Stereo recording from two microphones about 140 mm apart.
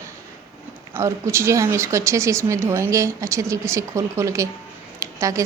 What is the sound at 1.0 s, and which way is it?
A woman's voice, 20° right (ahead or behind).